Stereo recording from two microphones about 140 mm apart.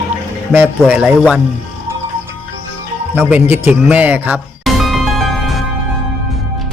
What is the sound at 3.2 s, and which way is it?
A man's voice, 10° right (ahead or behind).